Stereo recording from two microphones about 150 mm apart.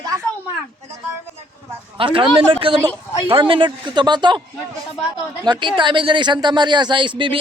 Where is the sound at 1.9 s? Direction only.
35° right (ahead or behind).